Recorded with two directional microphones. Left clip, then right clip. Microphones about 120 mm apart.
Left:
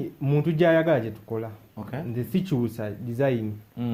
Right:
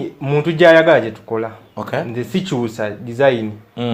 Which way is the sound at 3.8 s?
20° right (ahead or behind).